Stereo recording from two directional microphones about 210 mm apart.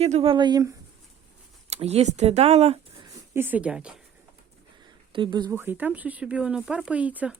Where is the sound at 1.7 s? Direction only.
30° right (ahead or behind).